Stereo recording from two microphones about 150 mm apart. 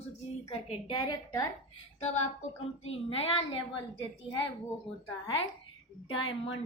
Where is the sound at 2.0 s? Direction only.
45° left (ahead or behind).